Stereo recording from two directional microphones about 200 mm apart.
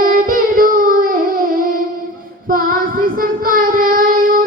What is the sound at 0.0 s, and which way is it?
Music, 45° right (ahead or behind).